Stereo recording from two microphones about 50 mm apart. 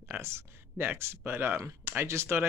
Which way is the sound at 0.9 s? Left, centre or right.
Right.